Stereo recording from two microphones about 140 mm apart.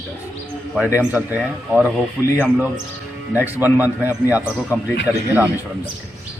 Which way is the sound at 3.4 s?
15° right (ahead or behind).